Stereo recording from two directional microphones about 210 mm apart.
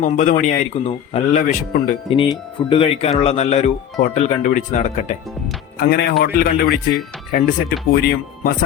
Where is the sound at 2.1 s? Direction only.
25° left (ahead or behind).